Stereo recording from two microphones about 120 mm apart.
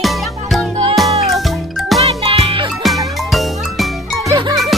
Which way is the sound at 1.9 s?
55° right (ahead or behind).